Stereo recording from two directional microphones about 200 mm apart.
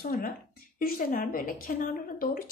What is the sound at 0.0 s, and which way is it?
A woman's voice, 45° left (ahead or behind).